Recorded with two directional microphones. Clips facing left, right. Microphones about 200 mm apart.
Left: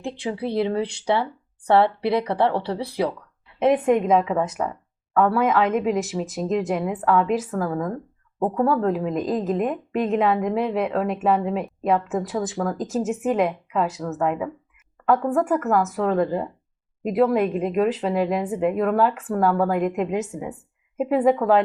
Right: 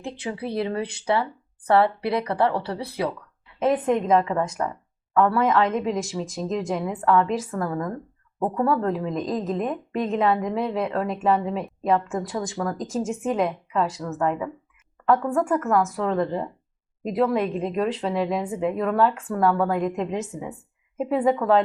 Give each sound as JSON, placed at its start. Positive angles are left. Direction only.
{"t": 0.3, "sound": "speech", "side_deg": 20}
{"t": 1.7, "sound": "speech", "side_deg": 20}
{"t": 3.8, "sound": "a woman's voice", "side_deg": 5}